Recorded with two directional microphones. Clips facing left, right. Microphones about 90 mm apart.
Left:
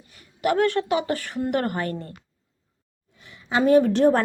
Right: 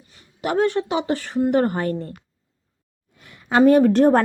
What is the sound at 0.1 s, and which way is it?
A woman's voice, 30° right (ahead or behind).